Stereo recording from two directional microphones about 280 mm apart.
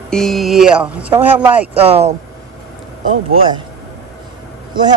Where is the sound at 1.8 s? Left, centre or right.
Right.